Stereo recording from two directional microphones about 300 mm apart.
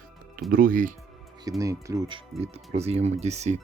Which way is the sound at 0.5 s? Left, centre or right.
Right.